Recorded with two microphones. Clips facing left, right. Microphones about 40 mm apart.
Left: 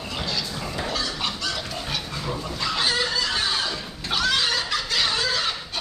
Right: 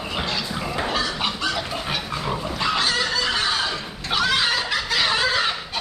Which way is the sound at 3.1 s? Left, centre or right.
Right.